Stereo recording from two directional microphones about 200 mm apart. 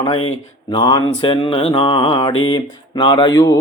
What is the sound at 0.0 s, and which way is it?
Mantra, 25° left (ahead or behind).